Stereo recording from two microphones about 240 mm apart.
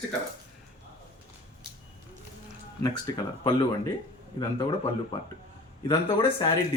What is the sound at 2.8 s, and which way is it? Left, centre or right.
Speech, centre.